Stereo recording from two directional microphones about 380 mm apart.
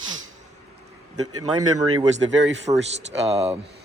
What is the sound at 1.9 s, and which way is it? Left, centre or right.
Speech, right.